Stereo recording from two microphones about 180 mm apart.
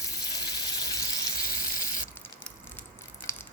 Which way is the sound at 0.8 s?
20° left (ahead or behind).